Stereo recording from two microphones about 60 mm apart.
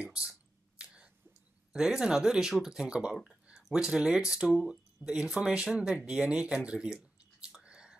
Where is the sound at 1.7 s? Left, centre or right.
Centre.